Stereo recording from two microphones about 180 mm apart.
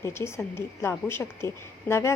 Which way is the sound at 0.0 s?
15° left (ahead or behind).